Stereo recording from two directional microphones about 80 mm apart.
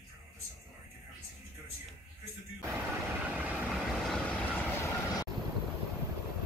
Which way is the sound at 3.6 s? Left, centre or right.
Centre.